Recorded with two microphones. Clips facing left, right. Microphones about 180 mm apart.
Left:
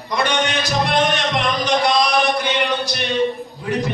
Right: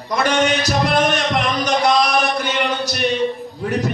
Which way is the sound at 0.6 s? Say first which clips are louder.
Right 1 dB; 40° right (ahead or behind).